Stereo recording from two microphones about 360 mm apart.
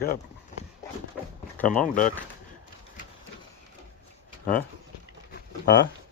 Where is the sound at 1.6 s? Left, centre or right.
Left.